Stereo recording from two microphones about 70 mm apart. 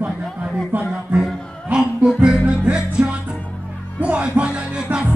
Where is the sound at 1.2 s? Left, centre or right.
Centre.